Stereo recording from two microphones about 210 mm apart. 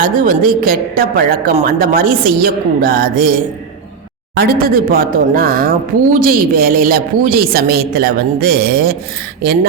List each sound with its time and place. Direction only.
0.0 s a woman's voice: 40° right (ahead or behind)